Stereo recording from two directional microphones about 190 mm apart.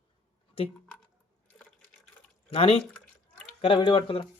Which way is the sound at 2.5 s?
30° left (ahead or behind).